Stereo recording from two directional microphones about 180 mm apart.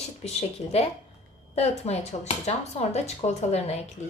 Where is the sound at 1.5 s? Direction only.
35° left (ahead or behind).